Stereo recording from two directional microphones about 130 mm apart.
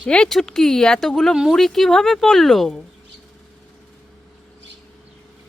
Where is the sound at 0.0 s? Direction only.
5° left (ahead or behind).